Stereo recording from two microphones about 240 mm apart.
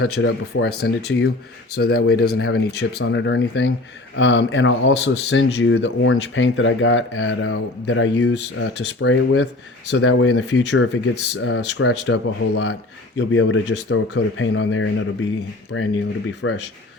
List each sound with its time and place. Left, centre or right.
0.0 s speech: left
1.7 s speech: left